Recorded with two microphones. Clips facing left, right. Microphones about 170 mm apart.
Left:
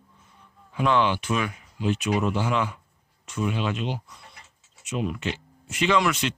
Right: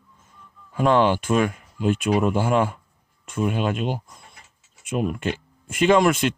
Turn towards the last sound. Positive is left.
turn(degrees=-50)  # may be behind; listen again after turning